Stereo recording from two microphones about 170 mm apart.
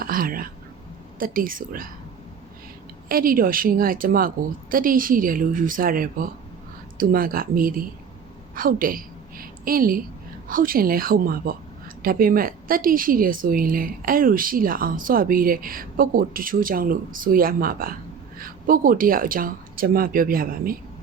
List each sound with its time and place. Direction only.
0.0 s whispering: 60° right (ahead or behind)
1.2 s a woman's voice: 55° right (ahead or behind)
3.1 s a woman's voice: 55° right (ahead or behind)